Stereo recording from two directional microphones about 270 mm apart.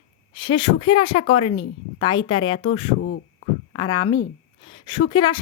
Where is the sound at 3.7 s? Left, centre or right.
Centre.